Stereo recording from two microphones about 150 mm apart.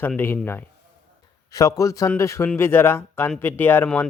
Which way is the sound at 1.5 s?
25° left (ahead or behind).